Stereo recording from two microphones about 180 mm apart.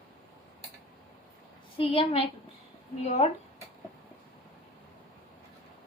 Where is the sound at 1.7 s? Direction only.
30° left (ahead or behind).